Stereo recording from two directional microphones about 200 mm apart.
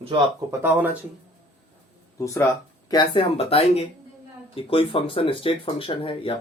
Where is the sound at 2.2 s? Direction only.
15° left (ahead or behind).